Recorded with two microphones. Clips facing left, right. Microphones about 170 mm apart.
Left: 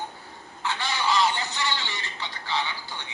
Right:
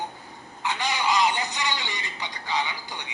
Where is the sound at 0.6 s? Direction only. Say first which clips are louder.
Right 1 dB; 15° right (ahead or behind).